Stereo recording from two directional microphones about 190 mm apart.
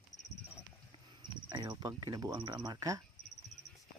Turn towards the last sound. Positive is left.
turn(degrees=-20)  # may be behind; listen again after turning